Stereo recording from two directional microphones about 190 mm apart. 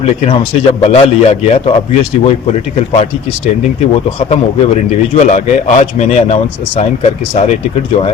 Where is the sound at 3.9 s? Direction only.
30° left (ahead or behind).